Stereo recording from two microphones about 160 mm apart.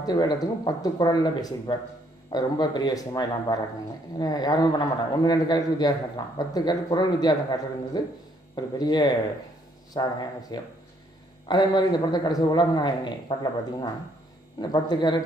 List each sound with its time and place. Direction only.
0.0 s a man's voice: 25° left (ahead or behind)